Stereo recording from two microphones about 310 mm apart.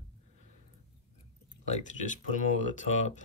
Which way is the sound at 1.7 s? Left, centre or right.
Left.